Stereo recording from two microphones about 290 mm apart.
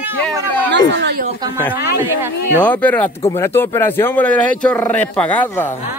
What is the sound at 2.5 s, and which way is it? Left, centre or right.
Speech, centre.